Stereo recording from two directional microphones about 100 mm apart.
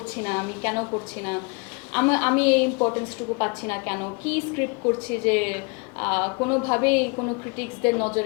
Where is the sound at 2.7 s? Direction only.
20° left (ahead or behind).